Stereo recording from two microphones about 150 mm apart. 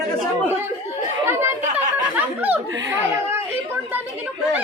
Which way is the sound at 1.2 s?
15° right (ahead or behind).